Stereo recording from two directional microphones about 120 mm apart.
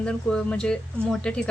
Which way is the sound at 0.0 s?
10° left (ahead or behind).